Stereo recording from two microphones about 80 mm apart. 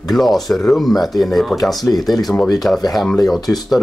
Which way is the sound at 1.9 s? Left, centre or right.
Left.